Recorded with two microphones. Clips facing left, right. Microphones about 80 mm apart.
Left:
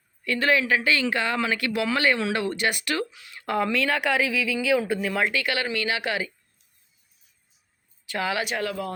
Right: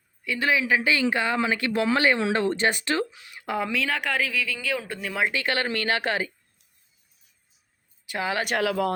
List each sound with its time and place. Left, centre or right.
0.3 s speech: centre
3.4 s speech: centre
5.2 s speech: right
8.0 s speech: right
8.5 s speech: right